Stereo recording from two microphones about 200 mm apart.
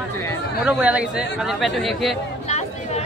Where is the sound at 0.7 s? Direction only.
5° right (ahead or behind).